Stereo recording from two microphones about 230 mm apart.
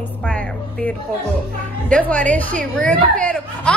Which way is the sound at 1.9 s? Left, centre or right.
Centre.